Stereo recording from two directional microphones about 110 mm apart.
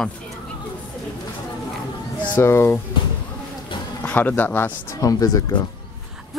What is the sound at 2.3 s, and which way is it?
Speech, 25° left (ahead or behind).